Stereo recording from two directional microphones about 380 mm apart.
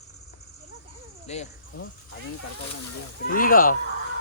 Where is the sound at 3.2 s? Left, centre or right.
Left.